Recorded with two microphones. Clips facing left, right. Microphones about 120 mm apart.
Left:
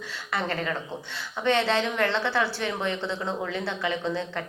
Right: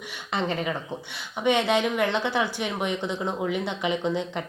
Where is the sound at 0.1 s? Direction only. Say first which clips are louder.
Right 2 dB; 20° right (ahead or behind).